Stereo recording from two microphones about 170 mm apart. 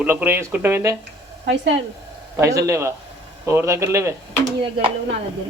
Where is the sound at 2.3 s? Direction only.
20° right (ahead or behind).